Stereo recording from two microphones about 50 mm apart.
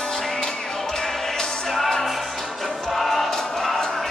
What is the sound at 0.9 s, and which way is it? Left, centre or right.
Music, centre.